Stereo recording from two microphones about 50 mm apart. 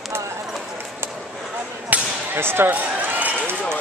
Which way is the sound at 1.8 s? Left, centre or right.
Right.